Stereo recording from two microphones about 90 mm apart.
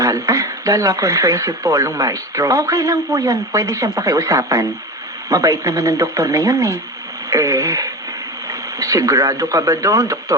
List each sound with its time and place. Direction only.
0.0 s speech: 40° right (ahead or behind)